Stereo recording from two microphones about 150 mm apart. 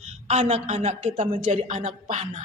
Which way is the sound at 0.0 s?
45° right (ahead or behind).